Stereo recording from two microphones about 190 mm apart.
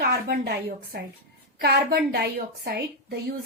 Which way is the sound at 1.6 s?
60° right (ahead or behind).